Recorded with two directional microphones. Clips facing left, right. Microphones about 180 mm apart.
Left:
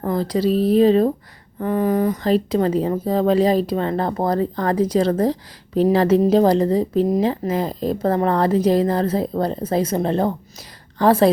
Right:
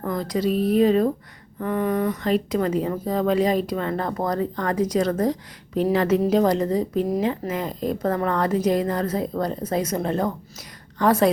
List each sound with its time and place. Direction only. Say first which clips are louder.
0.0 s a woman's voice: left 4 dB; 30° left (ahead or behind)